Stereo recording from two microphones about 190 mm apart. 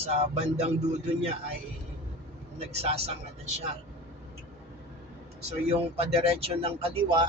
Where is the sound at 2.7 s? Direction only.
35° right (ahead or behind).